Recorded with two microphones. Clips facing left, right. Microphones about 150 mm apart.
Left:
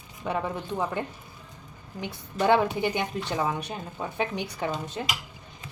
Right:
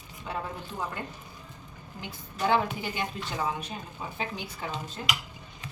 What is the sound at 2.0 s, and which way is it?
A woman's voice, 65° left (ahead or behind).